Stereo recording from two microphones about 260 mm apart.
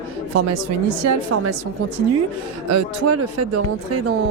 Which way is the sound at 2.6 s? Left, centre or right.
Right.